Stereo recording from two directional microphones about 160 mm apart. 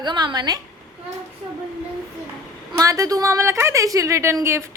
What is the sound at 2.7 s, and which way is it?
A woman's voice, 20° right (ahead or behind).